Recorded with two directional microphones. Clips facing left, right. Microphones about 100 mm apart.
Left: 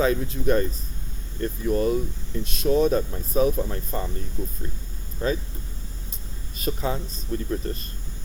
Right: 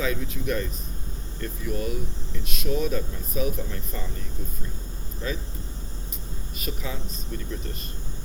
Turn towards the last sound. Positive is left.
turn(degrees=40)  # may be behind; listen again after turning